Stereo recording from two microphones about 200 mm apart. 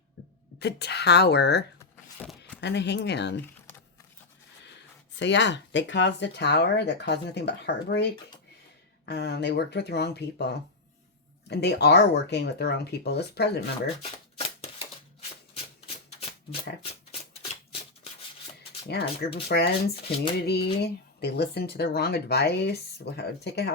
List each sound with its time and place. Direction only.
0.6 s speech: 55° left (ahead or behind)
2.2 s a sound: 5° left (ahead or behind)
2.6 s speech: 60° left (ahead or behind)
5.1 s speech: 65° left (ahead or behind)
9.0 s speech: 55° left (ahead or behind)
14.0 s shuffling cards: 30° left (ahead or behind)
17.1 s scissors: 30° left (ahead or behind)
18.9 s speech: 55° left (ahead or behind)